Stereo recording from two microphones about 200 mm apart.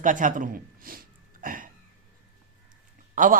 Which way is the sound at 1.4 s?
45° right (ahead or behind).